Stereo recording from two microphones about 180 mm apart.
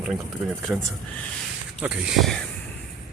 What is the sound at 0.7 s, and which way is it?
Speech, 5° right (ahead or behind).